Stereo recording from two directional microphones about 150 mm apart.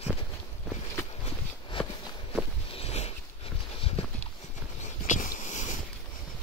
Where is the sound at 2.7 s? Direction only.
45° left (ahead or behind).